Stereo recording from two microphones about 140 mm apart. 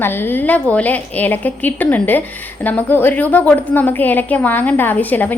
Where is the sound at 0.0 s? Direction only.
15° left (ahead or behind).